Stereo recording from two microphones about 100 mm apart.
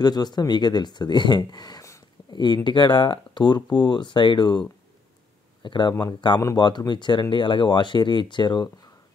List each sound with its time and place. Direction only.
0.0 s speech: 45° left (ahead or behind)
2.3 s speech: 50° left (ahead or behind)